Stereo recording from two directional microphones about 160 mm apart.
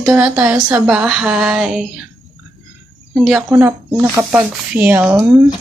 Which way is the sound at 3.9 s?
20° right (ahead or behind).